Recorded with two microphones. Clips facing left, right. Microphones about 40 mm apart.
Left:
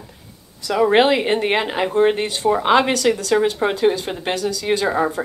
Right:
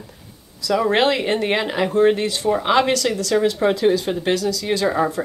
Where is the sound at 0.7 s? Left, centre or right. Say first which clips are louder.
Left 3 dB; centre.